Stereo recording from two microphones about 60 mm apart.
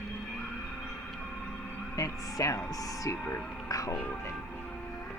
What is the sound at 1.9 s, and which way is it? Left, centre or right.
Speech, left.